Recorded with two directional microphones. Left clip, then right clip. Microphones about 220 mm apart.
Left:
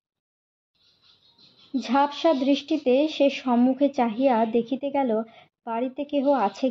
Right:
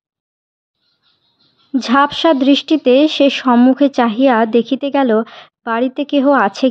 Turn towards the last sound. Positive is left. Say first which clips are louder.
# right 10 dB
turn(degrees=-35)  # may be behind; listen again after turning